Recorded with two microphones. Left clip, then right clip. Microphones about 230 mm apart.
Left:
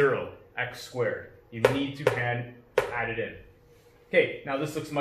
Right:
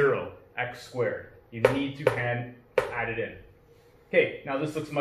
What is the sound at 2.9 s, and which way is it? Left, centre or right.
Speech, centre.